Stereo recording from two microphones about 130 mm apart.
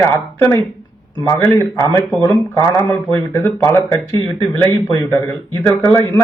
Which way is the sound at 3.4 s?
20° left (ahead or behind).